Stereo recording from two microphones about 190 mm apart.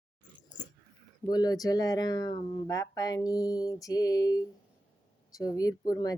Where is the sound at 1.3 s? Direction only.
20° left (ahead or behind).